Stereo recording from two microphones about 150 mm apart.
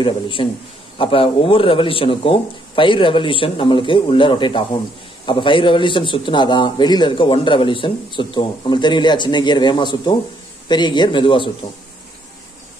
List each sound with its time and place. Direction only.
0.0 s a man's voice: 35° left (ahead or behind)